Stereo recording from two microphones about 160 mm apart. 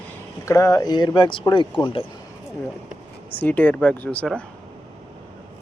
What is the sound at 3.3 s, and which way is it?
Speech, 10° left (ahead or behind).